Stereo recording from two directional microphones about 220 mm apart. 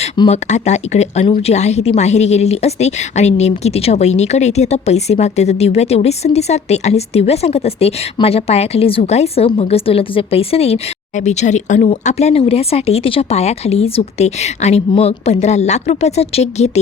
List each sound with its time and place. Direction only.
0.0 s speech: 30° left (ahead or behind)